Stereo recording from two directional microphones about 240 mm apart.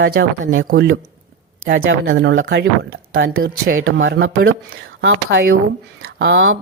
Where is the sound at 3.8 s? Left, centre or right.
Right.